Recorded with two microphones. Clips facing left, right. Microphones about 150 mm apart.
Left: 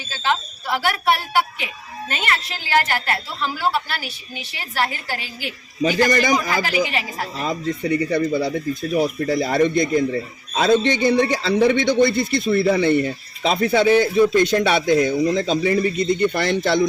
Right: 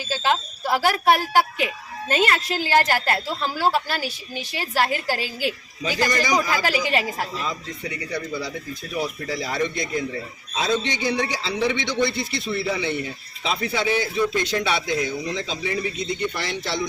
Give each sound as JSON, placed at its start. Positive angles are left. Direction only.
{"t": 0.7, "sound": "a woman's voice", "side_deg": -40}
{"t": 5.8, "sound": "a man's voice", "side_deg": 55}